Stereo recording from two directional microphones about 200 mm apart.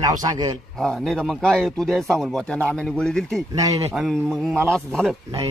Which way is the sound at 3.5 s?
15° right (ahead or behind).